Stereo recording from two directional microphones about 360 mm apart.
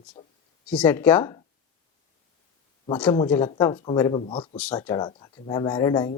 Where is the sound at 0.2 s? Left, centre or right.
Centre.